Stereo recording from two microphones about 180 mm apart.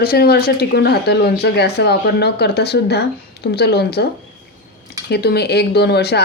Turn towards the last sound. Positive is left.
turn(degrees=65)  # may be behind; listen again after turning